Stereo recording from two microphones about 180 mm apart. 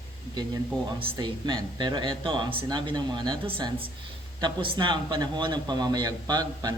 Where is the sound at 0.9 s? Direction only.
25° right (ahead or behind).